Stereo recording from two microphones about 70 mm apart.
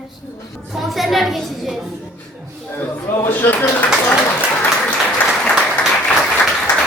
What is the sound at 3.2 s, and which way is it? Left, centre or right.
Speech, left.